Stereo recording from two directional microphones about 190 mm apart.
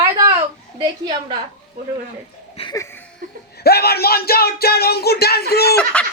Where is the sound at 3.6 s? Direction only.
55° left (ahead or behind).